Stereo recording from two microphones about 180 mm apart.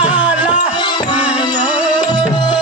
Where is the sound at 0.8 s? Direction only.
25° left (ahead or behind).